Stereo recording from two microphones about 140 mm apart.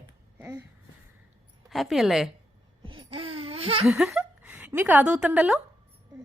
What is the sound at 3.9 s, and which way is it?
A woman's voice, 5° right (ahead or behind).